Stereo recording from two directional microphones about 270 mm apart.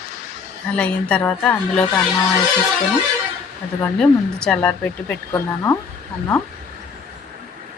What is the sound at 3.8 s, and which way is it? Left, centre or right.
Speech, centre.